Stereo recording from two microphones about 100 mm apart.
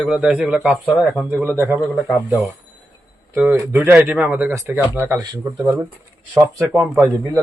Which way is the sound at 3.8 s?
20° right (ahead or behind).